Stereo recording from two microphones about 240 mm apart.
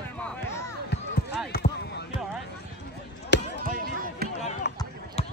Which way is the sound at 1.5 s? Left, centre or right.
Left.